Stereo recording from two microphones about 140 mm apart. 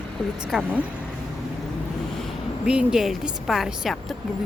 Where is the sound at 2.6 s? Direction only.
5° right (ahead or behind).